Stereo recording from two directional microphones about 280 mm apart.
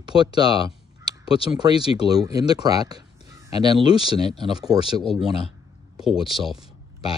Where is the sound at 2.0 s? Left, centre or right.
Centre.